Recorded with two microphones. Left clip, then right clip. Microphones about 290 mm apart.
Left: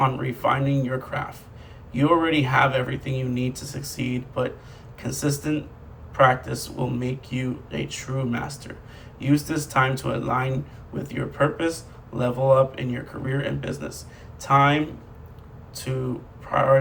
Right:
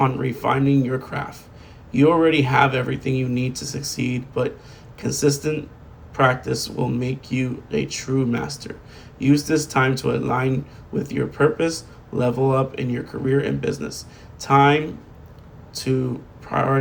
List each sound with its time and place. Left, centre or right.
0.0 s speech: centre